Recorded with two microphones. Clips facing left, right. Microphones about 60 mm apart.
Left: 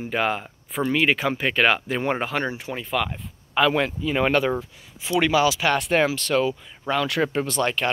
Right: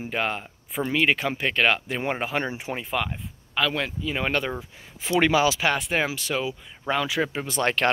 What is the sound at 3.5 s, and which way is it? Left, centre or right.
Speech, centre.